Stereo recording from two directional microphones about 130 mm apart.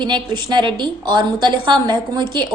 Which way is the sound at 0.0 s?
35° right (ahead or behind).